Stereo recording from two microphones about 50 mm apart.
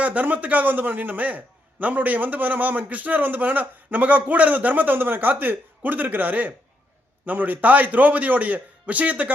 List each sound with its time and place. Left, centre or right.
0.0 s a man's voice: right